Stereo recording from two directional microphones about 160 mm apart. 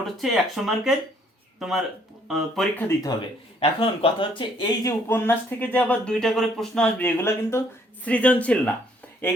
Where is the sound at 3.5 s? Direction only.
35° left (ahead or behind).